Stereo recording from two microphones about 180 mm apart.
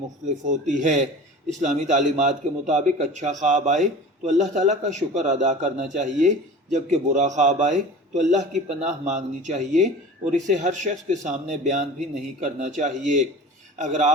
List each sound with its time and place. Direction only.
0.4 s a man's voice: 45° right (ahead or behind)